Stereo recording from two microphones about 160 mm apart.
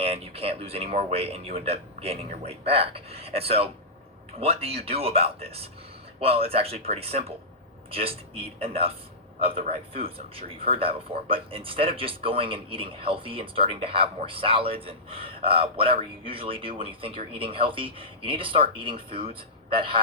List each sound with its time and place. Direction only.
0.0 s a man's voice: 40° right (ahead or behind)